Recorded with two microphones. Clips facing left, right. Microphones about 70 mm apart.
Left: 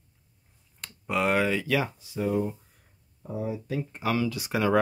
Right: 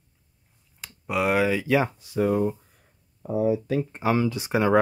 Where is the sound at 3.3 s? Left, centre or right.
Right.